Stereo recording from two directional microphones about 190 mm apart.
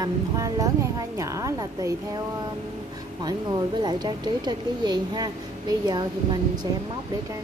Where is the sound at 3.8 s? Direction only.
20° right (ahead or behind).